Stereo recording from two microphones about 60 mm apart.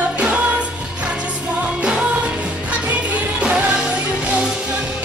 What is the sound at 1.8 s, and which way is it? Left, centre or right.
Music, centre.